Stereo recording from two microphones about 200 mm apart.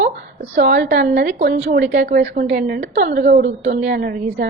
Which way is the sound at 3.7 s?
40° right (ahead or behind).